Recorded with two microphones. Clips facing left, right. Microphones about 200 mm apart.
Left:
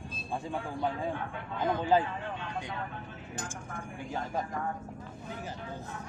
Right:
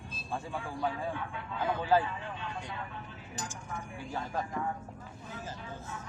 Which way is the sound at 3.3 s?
55° left (ahead or behind).